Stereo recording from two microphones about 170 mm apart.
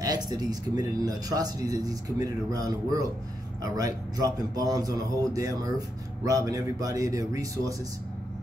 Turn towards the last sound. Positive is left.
turn(degrees=-20)  # may be behind; listen again after turning